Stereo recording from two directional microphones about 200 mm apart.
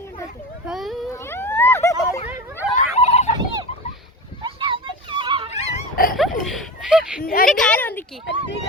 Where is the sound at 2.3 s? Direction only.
10° right (ahead or behind).